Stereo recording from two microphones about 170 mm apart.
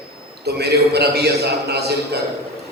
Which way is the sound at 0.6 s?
75° right (ahead or behind).